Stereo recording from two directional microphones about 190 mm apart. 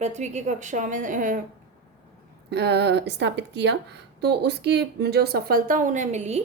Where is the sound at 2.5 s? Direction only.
60° right (ahead or behind).